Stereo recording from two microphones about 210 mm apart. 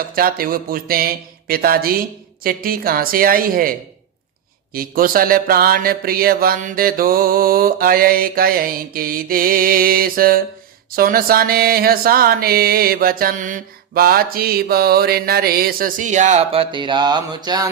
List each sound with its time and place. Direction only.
0.2 s mantra: 45° right (ahead or behind)
4.7 s mantra: 45° right (ahead or behind); by 17.7 s 20° right (ahead or behind)